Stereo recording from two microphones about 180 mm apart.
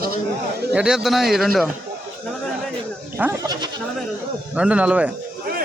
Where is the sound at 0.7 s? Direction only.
5° right (ahead or behind).